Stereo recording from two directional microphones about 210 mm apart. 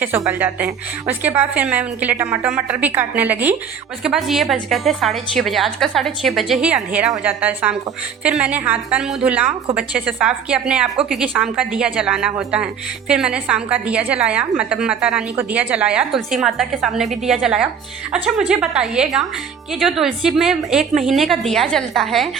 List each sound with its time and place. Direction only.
0.0 s a woman's voice: 10° right (ahead or behind)